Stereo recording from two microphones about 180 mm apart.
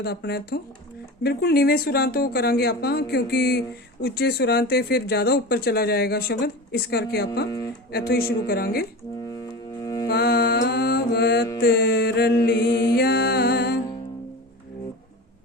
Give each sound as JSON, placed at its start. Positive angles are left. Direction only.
{"t": 0.0, "sound": "speech", "side_deg": 65}
{"t": 9.2, "sound": "music", "side_deg": 20}
{"t": 10.1, "sound": "music", "side_deg": 60}